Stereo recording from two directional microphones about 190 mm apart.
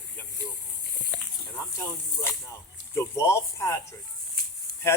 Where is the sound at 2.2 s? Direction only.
15° left (ahead or behind).